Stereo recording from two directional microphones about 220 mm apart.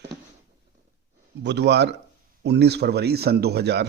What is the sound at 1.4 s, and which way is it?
Speech, 50° right (ahead or behind).